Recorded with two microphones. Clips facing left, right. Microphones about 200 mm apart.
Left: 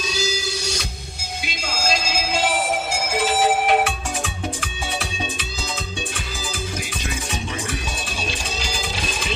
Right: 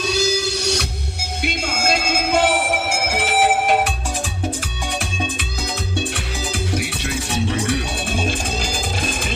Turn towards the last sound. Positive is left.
turn(degrees=-65)  # may be behind; listen again after turning